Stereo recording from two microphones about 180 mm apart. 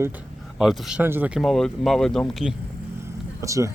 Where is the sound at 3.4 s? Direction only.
15° right (ahead or behind).